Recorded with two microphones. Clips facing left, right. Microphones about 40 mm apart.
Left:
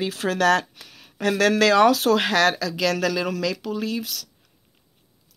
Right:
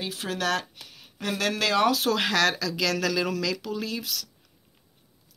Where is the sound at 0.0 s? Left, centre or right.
Left.